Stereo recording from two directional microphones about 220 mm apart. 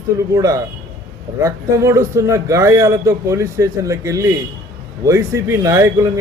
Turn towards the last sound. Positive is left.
turn(degrees=-15)  # may be behind; listen again after turning